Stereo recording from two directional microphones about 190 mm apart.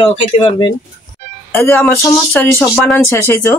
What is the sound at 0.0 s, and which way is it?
Speech, 25° left (ahead or behind).